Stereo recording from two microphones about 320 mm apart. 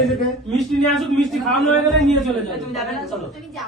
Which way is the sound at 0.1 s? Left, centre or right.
Centre.